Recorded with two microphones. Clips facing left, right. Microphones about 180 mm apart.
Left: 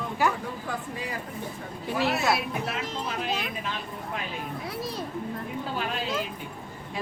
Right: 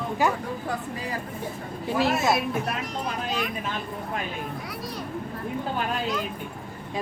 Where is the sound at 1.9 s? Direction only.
45° right (ahead or behind).